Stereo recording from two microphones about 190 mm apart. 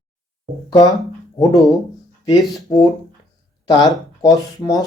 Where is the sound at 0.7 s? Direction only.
20° left (ahead or behind).